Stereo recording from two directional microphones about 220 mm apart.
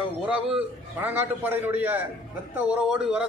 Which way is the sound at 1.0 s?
10° right (ahead or behind).